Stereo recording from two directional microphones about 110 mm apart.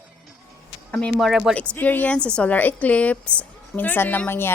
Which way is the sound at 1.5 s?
15° left (ahead or behind).